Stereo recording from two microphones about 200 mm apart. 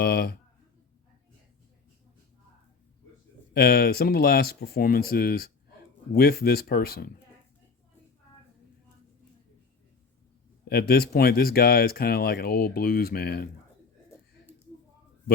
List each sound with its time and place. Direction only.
0.0 s speech: 50° left (ahead or behind)
3.5 s speech: 50° left (ahead or behind)
10.7 s speech: 50° left (ahead or behind)